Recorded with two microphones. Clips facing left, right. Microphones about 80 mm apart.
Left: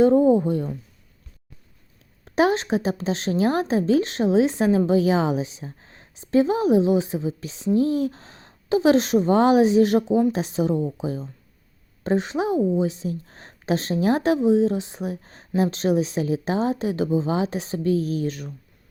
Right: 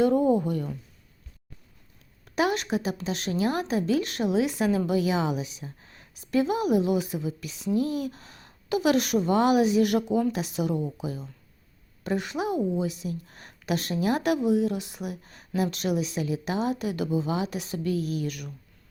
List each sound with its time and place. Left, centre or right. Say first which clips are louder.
0.0 s speech: left 6 dB; left
2.2 s a woman's voice: left 6 dB; left